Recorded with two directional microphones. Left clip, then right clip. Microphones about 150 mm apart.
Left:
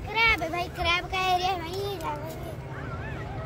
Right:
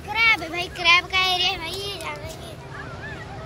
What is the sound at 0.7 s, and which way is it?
Speech, 90° left.